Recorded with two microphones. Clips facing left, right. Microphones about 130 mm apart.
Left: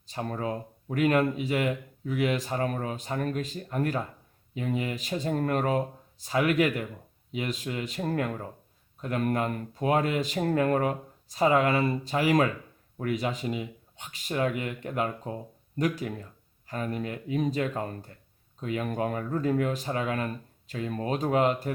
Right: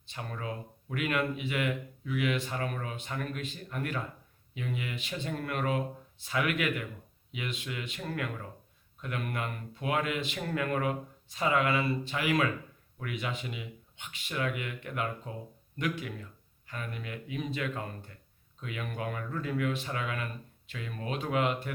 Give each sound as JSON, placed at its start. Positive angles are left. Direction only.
{"t": 0.0, "sound": "speech", "side_deg": 40}